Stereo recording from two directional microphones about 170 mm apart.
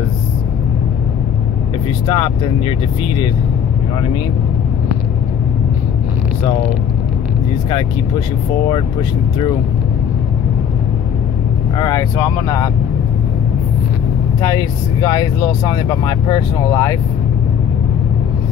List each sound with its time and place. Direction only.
2.0 s speech: 30° left (ahead or behind)
11.8 s speech: 20° left (ahead or behind)
14.4 s speech: 25° left (ahead or behind)